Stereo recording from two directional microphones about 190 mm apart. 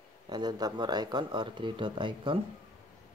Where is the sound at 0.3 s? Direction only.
20° right (ahead or behind).